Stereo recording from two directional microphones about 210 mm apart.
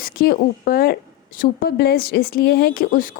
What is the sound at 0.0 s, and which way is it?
A woman's voice, 45° left (ahead or behind).